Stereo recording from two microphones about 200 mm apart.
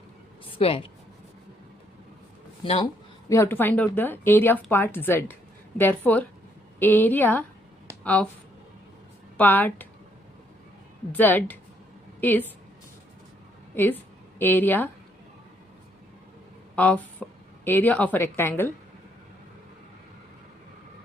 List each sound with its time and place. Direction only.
0.4 s a woman's voice: 25° left (ahead or behind)
3.2 s a woman's voice: 15° left (ahead or behind)
9.4 s a woman's voice: 10° left (ahead or behind)
11.1 s a woman's voice: 10° left (ahead or behind)
13.7 s a woman's voice: 10° left (ahead or behind)
16.7 s a woman's voice: 5° left (ahead or behind)